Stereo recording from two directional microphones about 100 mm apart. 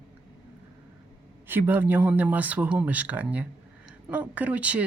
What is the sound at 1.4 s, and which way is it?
Speech, 20° right (ahead or behind).